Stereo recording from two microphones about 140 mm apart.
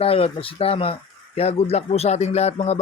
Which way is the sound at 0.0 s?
45° left (ahead or behind).